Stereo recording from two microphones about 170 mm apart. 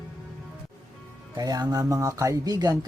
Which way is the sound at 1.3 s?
20° right (ahead or behind).